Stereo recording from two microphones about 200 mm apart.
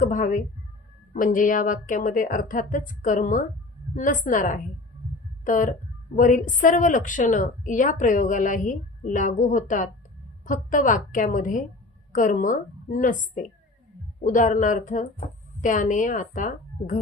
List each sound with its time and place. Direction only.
0.0 s a woman's voice: 40° left (ahead or behind)